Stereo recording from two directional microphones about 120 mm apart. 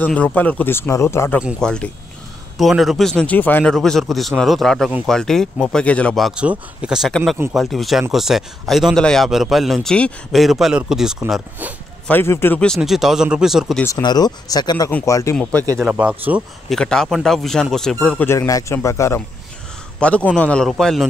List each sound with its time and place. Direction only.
0.0 s speech: 15° left (ahead or behind)
1.6 s a man's voice: 5° left (ahead or behind)
3.7 s a man's voice: 5° left (ahead or behind)
6.4 s speech: 10° right (ahead or behind)
7.1 s a man's voice: 5° left (ahead or behind)
12.1 s speech: 20° left (ahead or behind)
12.5 s a man's voice: 5° left (ahead or behind)
14.0 s a man's voice: 35° left (ahead or behind)
15.8 s speech: 10° right (ahead or behind)
16.6 s a man's voice: 5° left (ahead or behind)
18.3 s a man's voice: 25° left (ahead or behind)
20.0 s speech: 10° left (ahead or behind)